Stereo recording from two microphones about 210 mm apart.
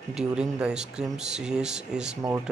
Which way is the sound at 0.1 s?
5° right (ahead or behind).